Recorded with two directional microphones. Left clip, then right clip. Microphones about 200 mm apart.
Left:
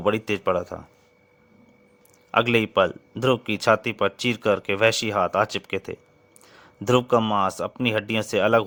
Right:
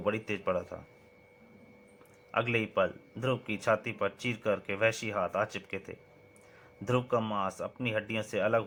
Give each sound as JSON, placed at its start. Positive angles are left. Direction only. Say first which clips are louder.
{"t": 0.0, "sound": "speech", "louder": "left 9 dB", "side_deg": 50}
{"t": 2.3, "sound": "speech", "louder": "left 10 dB", "side_deg": 55}